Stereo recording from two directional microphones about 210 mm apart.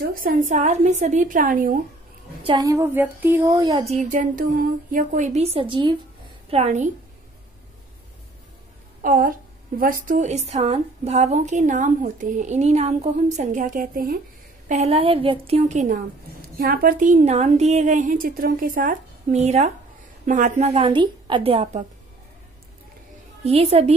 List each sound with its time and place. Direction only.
0.1 s a woman's voice: 40° right (ahead or behind)
2.4 s speech: 20° right (ahead or behind)
3.9 s a woman's voice: 35° right (ahead or behind)
6.5 s a woman's voice: 35° right (ahead or behind)
9.0 s a woman's voice: 40° right (ahead or behind)
14.7 s a woman's voice: 30° right (ahead or behind)
23.4 s a woman's voice: 30° right (ahead or behind)